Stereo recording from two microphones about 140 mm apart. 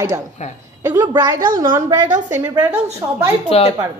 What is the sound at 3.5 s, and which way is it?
Speech, 45° left (ahead or behind).